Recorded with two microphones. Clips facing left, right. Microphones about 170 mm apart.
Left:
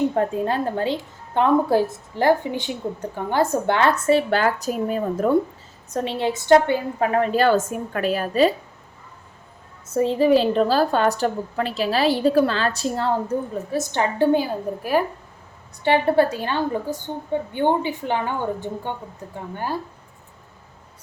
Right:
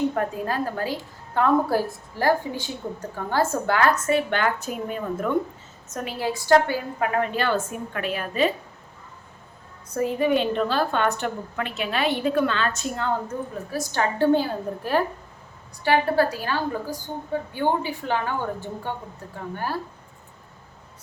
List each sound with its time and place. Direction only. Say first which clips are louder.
0.1 s a woman's voice: left 4 dB; 25° left (ahead or behind)
9.9 s a woman's voice: left 5 dB; 25° left (ahead or behind)
13.7 s a woman's voice: left 1 dB; 20° left (ahead or behind)
15.8 s a woman's voice: left 3 dB; 25° left (ahead or behind)